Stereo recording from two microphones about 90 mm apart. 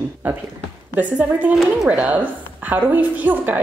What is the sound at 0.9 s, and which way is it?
A woman's voice, 15° right (ahead or behind).